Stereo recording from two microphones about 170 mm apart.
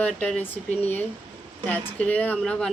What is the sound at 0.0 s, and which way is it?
Speech, 5° left (ahead or behind).